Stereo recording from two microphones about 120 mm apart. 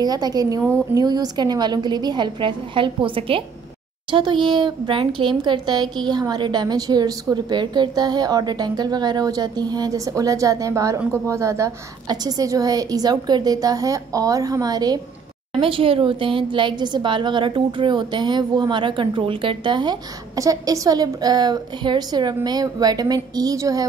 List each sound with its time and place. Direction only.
0.0 s a woman's voice: 35° right (ahead or behind)
15.6 s a woman's voice: 50° right (ahead or behind); by 23.9 s 30° right (ahead or behind)